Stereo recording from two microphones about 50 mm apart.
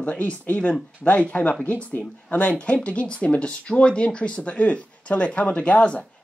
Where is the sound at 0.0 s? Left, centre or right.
Left.